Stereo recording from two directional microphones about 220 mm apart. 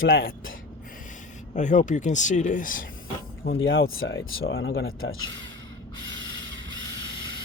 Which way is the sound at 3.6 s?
60° left (ahead or behind).